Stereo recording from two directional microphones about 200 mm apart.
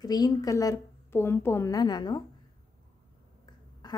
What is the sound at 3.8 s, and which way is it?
Quack, 20° left (ahead or behind).